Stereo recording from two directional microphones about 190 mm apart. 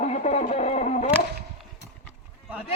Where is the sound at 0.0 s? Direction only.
35° left (ahead or behind).